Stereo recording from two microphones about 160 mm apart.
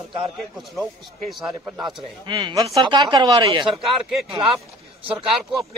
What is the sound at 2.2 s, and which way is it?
Speech, 25° right (ahead or behind).